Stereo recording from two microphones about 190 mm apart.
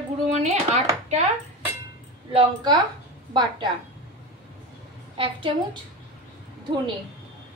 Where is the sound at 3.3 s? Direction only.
25° right (ahead or behind).